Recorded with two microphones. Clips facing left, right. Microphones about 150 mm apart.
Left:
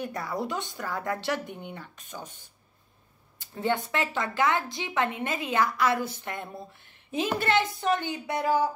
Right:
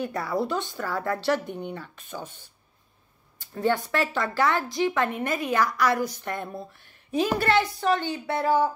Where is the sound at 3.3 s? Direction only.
20° left (ahead or behind).